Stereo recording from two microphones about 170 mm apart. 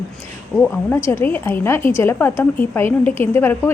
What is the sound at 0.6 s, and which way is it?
A woman's voice, 15° left (ahead or behind).